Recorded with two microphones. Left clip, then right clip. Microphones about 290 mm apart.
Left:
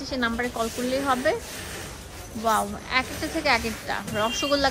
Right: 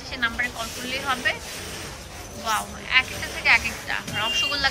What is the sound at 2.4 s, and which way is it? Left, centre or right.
A woman's voice, centre.